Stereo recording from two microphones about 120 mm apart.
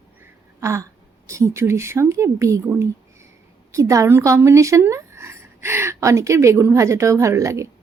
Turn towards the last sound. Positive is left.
turn(degrees=-25)  # may be behind; listen again after turning